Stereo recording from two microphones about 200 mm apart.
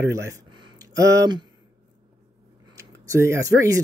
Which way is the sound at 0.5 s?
20° right (ahead or behind).